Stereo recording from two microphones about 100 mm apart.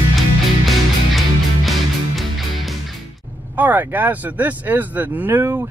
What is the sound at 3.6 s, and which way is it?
Speech, 20° right (ahead or behind).